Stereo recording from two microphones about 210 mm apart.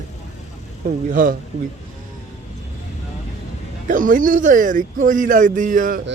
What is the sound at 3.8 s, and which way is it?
Speech, 40° right (ahead or behind).